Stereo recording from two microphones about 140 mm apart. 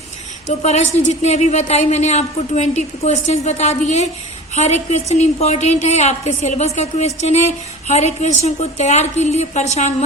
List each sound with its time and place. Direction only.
0.4 s a woman's voice: 55° left (ahead or behind)